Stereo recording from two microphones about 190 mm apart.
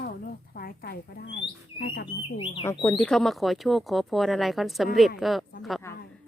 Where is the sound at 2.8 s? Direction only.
15° left (ahead or behind).